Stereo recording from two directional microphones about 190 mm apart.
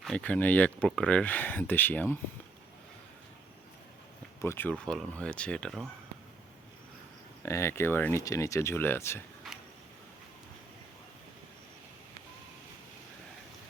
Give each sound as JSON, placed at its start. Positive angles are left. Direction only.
{"t": 0.0, "sound": "speech", "side_deg": 5}
{"t": 4.4, "sound": "speech", "side_deg": 15}
{"t": 7.4, "sound": "speech", "side_deg": 15}